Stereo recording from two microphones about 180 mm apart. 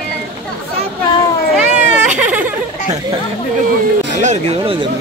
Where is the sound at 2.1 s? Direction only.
10° right (ahead or behind).